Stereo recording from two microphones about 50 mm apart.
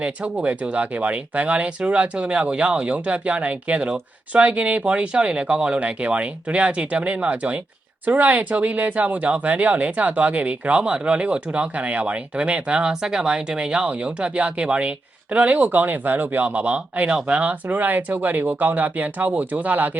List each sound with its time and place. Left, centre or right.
0.0 s speech: right